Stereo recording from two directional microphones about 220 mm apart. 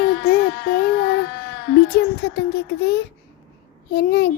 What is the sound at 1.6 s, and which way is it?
A child's voice, 50° left (ahead or behind).